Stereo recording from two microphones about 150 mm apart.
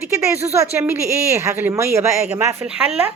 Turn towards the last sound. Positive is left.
turn(degrees=-10)  # may be behind; listen again after turning